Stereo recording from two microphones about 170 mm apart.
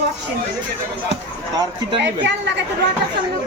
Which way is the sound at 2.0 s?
90° right.